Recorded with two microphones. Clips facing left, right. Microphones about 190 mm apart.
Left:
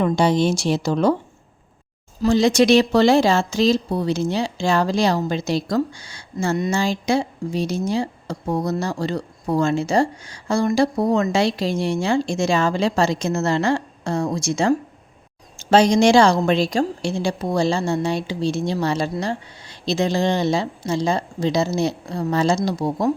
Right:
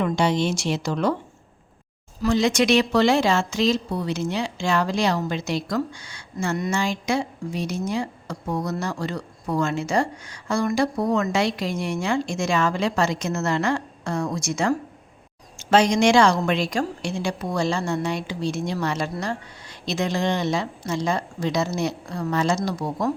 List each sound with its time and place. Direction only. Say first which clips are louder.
0.0 s speech: left 4 dB; 35° left (ahead or behind)
2.2 s speech: left 4 dB; 30° left (ahead or behind)